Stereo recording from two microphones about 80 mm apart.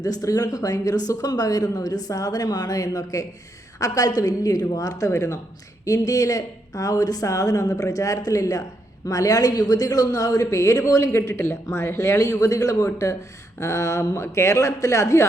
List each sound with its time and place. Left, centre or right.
0.0 s speech: left